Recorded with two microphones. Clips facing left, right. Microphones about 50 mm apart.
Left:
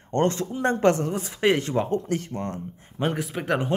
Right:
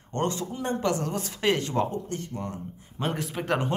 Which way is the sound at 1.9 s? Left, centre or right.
Left.